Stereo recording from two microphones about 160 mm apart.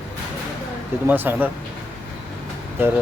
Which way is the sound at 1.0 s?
10° right (ahead or behind).